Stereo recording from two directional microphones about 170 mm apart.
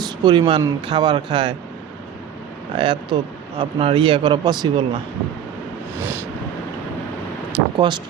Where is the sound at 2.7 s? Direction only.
30° right (ahead or behind).